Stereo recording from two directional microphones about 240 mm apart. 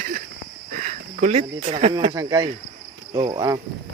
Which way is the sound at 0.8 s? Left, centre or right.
Right.